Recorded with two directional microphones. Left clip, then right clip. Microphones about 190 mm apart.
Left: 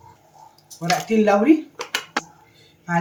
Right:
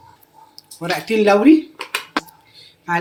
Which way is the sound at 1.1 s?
50° right (ahead or behind).